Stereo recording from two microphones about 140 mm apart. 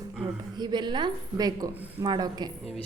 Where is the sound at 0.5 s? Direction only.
30° right (ahead or behind).